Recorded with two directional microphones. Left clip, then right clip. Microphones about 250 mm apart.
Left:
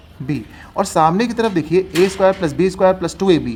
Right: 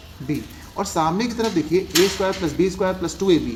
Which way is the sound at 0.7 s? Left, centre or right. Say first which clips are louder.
Left 7 dB; left.